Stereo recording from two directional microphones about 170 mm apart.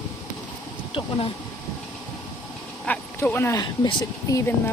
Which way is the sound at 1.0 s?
30° left (ahead or behind).